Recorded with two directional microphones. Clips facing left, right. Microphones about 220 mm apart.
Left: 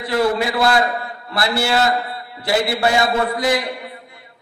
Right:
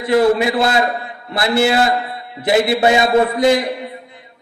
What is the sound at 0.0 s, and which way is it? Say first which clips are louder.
A man's voice: right 5 dB; 20° right (ahead or behind).